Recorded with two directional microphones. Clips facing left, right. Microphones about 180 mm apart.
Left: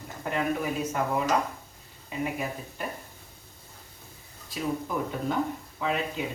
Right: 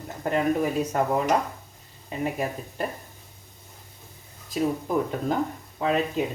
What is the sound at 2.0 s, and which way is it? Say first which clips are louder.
Speech: right 3 dB; 40° right (ahead or behind).